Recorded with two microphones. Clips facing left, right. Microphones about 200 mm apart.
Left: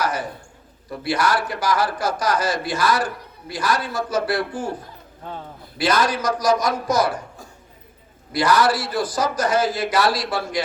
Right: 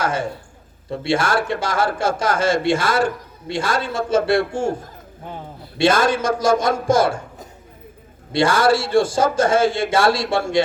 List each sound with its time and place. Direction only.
0.0 s a man's voice: 25° right (ahead or behind)